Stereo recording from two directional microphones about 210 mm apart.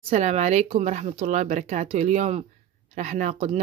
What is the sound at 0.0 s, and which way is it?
Speech, 30° right (ahead or behind).